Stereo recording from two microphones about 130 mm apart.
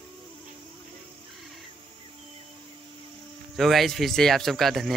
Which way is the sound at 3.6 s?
Centre (ahead or behind).